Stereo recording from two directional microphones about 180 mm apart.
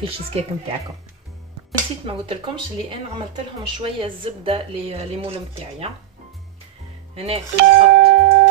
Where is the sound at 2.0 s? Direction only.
30° right (ahead or behind).